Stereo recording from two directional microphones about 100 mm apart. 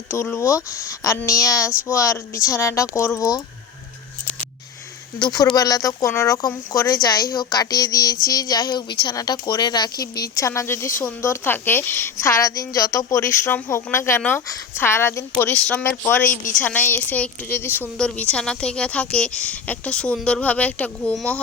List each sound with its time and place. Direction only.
0.3 s a woman's voice: 30° left (ahead or behind)
5.5 s a woman's voice: 40° left (ahead or behind)
15.6 s a woman's voice: 15° left (ahead or behind)
17.9 s a woman's voice: 10° left (ahead or behind)